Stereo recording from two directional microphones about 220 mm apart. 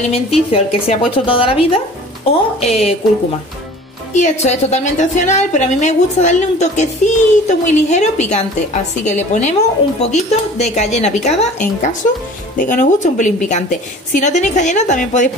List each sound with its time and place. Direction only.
0.5 s speech: 25° left (ahead or behind)
4.1 s a woman's voice: 30° left (ahead or behind)